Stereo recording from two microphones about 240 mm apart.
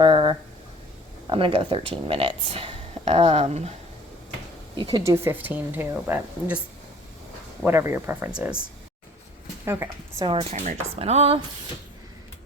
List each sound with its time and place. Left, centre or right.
0.0 s a sound: centre
1.3 s speech: right
4.8 s a woman's voice: centre
7.6 s a woman's voice: centre
9.6 s speech: centre